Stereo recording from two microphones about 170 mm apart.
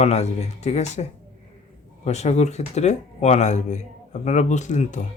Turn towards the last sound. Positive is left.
turn(degrees=45)  # may be behind; listen again after turning